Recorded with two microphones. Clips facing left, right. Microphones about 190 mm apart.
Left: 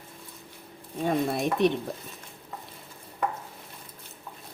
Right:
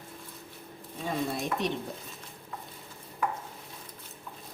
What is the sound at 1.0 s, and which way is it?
Speech, 60° left (ahead or behind).